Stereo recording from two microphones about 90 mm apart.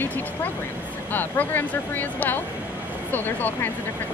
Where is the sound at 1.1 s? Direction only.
20° left (ahead or behind).